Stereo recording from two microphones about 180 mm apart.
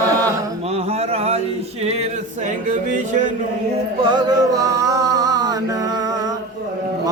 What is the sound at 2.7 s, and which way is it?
Music, 45° right (ahead or behind).